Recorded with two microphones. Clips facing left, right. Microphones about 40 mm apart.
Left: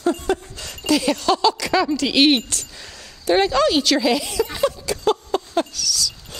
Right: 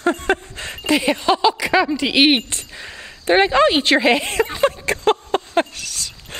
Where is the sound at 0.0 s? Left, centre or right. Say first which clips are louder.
Right 2 dB; right.